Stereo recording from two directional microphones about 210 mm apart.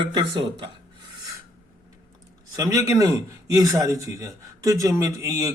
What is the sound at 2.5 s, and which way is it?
A man's voice, 15° right (ahead or behind).